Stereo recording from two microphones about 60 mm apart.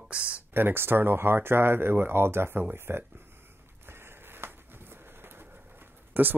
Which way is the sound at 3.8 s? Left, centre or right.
Right.